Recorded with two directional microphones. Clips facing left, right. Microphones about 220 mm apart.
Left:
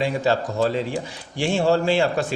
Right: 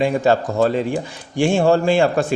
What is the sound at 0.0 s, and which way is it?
Speech, 50° right (ahead or behind).